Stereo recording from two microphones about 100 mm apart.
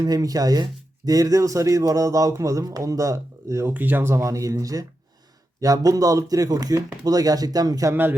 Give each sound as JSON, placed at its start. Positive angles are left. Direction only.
{"t": 0.0, "sound": "speech", "side_deg": -40}